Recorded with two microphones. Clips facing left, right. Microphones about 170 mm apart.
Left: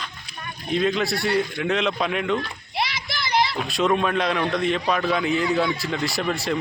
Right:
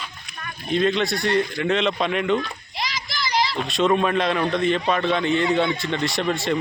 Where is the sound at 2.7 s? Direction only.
60° left (ahead or behind).